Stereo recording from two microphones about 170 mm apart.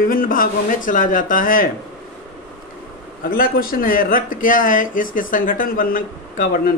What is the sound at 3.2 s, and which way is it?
Speech, 60° left (ahead or behind).